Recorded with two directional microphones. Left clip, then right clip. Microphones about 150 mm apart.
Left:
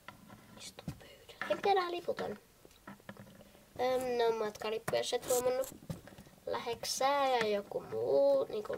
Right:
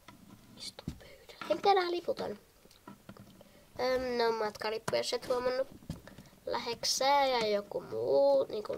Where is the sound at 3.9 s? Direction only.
20° right (ahead or behind).